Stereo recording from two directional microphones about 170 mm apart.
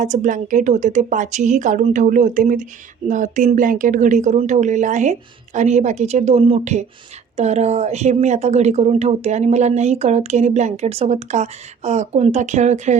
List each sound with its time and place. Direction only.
0.0 s a woman's voice: 50° right (ahead or behind)